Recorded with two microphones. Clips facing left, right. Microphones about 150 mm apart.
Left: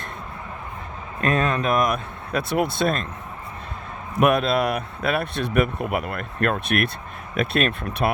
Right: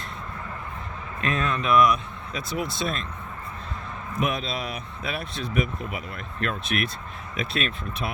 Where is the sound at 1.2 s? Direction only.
40° left (ahead or behind).